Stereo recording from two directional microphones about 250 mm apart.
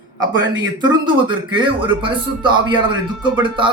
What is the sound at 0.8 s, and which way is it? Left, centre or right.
Speech, centre.